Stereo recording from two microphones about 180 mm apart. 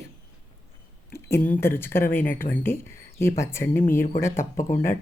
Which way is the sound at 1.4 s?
10° left (ahead or behind).